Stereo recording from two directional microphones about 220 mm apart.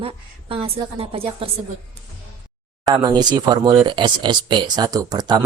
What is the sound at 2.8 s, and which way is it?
Speech, 20° right (ahead or behind).